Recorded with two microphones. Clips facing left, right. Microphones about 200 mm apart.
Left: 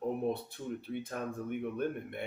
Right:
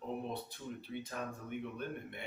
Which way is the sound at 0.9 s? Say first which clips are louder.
Left 2 dB; 55° left (ahead or behind).